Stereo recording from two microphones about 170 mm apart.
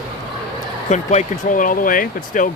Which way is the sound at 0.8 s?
45° left (ahead or behind).